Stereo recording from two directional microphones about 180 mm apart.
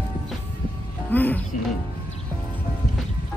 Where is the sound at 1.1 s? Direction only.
10° left (ahead or behind).